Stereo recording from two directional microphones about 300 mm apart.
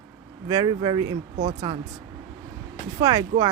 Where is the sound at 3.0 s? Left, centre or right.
Centre.